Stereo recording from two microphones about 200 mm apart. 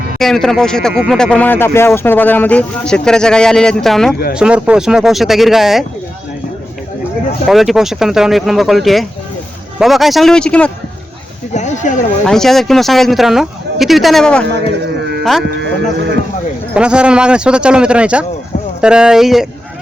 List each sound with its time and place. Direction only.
0.2 s speech: centre (ahead or behind)
7.4 s speech: centre (ahead or behind)
11.5 s speech: 35° left (ahead or behind)
12.2 s speech: centre (ahead or behind)
16.7 s speech: 5° right (ahead or behind)